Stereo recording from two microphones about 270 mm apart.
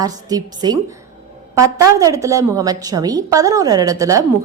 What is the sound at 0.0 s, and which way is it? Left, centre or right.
A woman's voice, centre.